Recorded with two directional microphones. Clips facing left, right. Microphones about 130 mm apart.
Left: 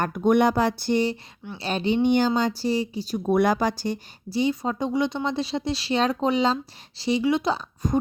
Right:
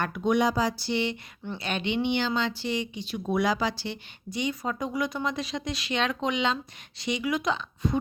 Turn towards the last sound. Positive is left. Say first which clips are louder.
# left 2 dB
turn(degrees=35)  # may be behind; listen again after turning